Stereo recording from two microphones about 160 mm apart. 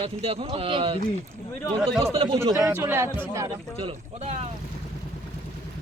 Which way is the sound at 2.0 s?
35° right (ahead or behind).